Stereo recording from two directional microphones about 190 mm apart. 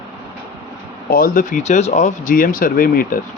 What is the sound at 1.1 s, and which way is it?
Speech, 45° left (ahead or behind).